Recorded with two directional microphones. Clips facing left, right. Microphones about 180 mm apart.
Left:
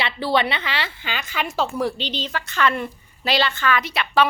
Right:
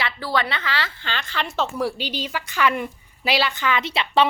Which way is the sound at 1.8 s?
10° right (ahead or behind).